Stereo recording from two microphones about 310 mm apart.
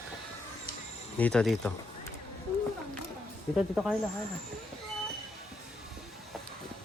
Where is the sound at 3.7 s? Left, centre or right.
Centre.